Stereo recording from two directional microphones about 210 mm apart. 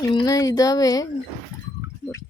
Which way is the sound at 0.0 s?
20° left (ahead or behind).